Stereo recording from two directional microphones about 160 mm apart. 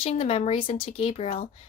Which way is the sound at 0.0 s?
35° left (ahead or behind).